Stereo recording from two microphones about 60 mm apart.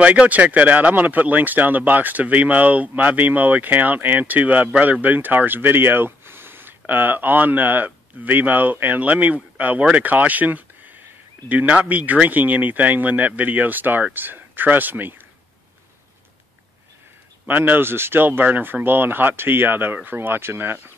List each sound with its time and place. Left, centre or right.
0.0 s speech: right
17.5 s speech: right